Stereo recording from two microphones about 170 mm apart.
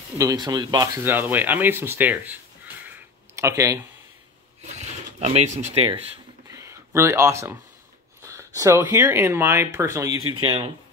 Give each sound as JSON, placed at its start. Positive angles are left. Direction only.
{"t": 0.2, "sound": "speech", "side_deg": -20}
{"t": 4.6, "sound": "speech", "side_deg": -40}
{"t": 6.4, "sound": "a sound", "side_deg": -15}
{"t": 8.2, "sound": "speech", "side_deg": -15}